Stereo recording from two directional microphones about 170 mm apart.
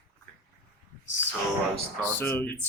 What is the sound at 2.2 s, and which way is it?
Speech, 10° left (ahead or behind).